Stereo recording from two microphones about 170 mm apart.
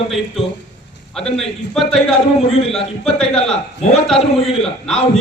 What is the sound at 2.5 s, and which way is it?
Speech, 35° left (ahead or behind).